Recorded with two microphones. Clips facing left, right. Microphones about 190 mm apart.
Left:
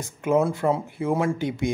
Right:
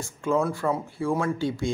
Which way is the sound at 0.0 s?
20° left (ahead or behind).